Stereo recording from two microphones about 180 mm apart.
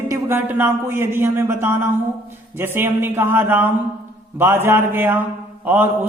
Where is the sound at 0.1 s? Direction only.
10° right (ahead or behind).